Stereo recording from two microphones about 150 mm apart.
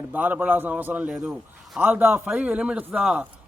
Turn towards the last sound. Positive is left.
turn(degrees=-10)  # may be behind; listen again after turning